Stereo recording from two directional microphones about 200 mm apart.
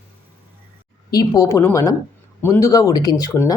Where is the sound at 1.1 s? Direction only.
20° left (ahead or behind).